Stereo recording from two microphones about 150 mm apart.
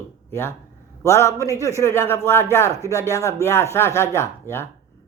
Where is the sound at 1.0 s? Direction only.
20° left (ahead or behind).